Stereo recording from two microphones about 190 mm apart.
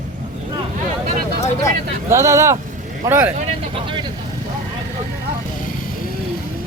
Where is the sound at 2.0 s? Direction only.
15° right (ahead or behind).